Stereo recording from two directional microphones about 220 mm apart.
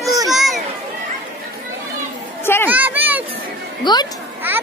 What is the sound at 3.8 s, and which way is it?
Speech, 20° left (ahead or behind).